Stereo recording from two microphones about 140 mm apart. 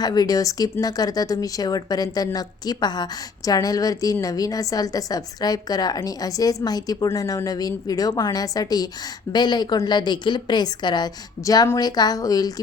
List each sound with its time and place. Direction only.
0.0 s speech: 30° left (ahead or behind)